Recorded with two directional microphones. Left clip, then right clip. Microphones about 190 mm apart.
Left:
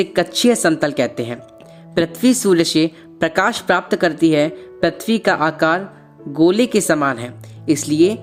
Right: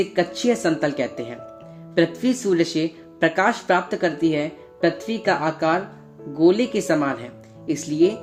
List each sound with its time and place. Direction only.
0.0 s speech: 40° left (ahead or behind)